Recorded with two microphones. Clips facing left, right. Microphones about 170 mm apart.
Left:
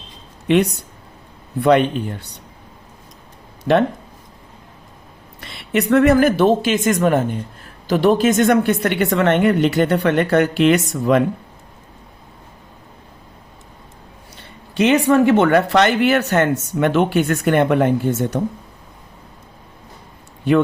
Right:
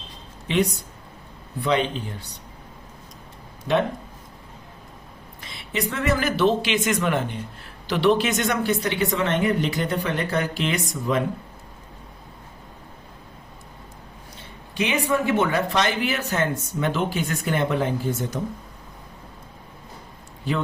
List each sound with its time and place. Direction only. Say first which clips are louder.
0.4 s speech: left 7 dB; 65° left (ahead or behind)
3.6 s speech: left 6 dB; 70° left (ahead or behind)
5.4 s speech: left 8 dB; 65° left (ahead or behind)
14.8 s speech: left 9 dB; 70° left (ahead or behind)